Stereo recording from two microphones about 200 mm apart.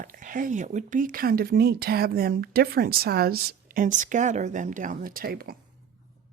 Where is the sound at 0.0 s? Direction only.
40° right (ahead or behind).